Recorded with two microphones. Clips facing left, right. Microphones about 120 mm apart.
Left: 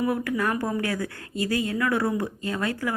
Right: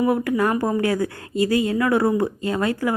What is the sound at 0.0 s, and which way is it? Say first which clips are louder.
A woman's voice: right 5 dB; 20° right (ahead or behind).